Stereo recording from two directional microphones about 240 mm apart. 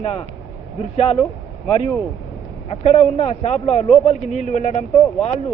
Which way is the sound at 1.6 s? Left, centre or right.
Left.